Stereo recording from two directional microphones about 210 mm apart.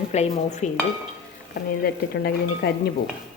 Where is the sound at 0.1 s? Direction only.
35° left (ahead or behind).